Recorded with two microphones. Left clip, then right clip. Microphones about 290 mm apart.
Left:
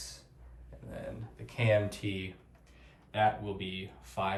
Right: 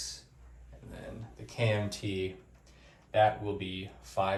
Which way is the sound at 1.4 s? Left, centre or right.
Centre.